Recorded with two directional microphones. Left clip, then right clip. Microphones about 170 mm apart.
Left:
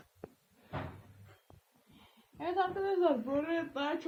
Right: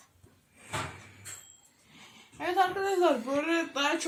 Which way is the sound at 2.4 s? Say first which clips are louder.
Right 6 dB; 25° right (ahead or behind).